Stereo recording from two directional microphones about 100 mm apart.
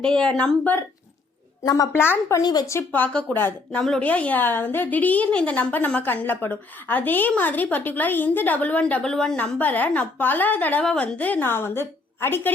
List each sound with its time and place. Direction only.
0.0 s a woman's voice: 5° left (ahead or behind)
1.6 s speech: 40° left (ahead or behind)
1.9 s speech: 20° left (ahead or behind)
2.4 s speech: 40° left (ahead or behind)
2.7 s a woman's voice: 15° left (ahead or behind)